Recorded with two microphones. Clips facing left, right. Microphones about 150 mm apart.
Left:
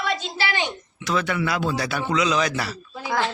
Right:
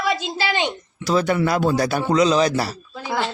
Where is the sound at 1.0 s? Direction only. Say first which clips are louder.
Right 5 dB; 35° right (ahead or behind).